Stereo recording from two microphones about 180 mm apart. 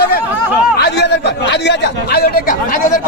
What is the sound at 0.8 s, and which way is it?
Speech, 70° left (ahead or behind).